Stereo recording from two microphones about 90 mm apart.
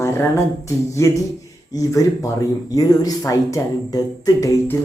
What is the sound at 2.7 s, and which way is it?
Speech, 45° left (ahead or behind).